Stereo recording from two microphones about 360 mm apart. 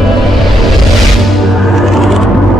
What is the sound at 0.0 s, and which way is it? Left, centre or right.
Music, centre.